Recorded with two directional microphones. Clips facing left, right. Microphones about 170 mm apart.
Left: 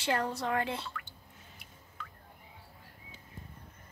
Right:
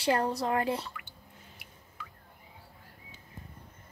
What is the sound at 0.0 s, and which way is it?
Speech, 35° right (ahead or behind).